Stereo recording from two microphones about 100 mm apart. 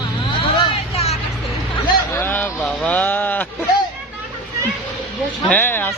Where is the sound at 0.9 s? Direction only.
90° left.